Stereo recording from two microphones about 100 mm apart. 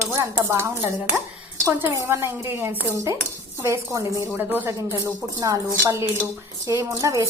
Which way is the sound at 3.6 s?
35° right (ahead or behind).